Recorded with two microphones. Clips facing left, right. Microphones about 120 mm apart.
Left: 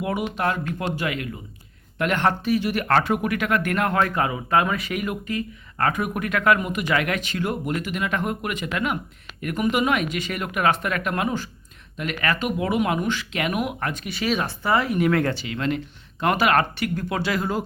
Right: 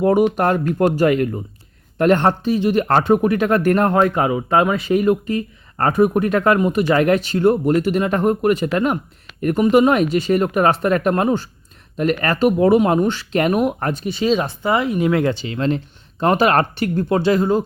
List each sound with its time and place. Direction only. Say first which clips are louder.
0.0 s speech: right 10 dB; 40° right (ahead or behind)
2.0 s speech: right 7 dB; 35° right (ahead or behind)
4.0 s speech: right 7 dB; 25° right (ahead or behind)
15.4 s speech: right 5 dB; 30° right (ahead or behind)